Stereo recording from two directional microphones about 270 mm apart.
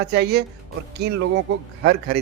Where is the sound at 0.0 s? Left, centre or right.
Right.